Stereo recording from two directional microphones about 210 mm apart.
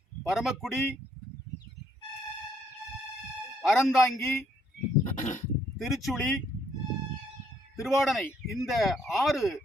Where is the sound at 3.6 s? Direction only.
Centre (ahead or behind).